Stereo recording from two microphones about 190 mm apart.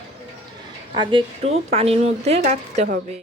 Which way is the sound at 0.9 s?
25° right (ahead or behind).